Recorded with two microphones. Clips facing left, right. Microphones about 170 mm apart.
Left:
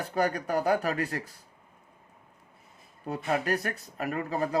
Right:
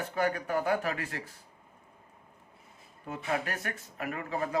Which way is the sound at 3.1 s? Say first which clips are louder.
Left 5 dB; 35° left (ahead or behind).